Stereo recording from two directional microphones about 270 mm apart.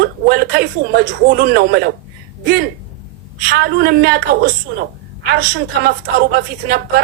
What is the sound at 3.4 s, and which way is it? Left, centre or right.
A woman's voice, right.